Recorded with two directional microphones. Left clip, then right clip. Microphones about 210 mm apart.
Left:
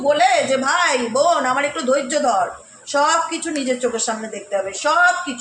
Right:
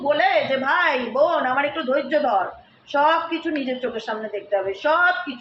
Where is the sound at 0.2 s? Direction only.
55° left (ahead or behind).